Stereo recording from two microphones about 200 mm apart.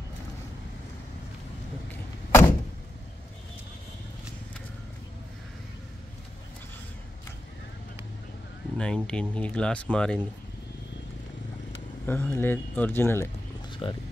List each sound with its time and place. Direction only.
1.9 s vehicle: 10° left (ahead or behind)
8.7 s speech: 5° left (ahead or behind)
12.1 s a man's voice: 10° left (ahead or behind)
13.7 s a sound: 25° left (ahead or behind)